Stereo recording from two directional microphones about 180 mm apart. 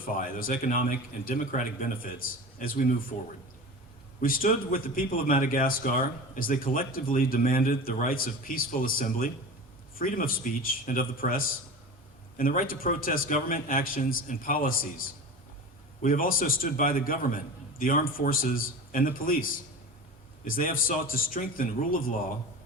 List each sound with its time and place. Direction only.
0.2 s a man's voice: 50° left (ahead or behind)
4.2 s a man's voice: 50° left (ahead or behind)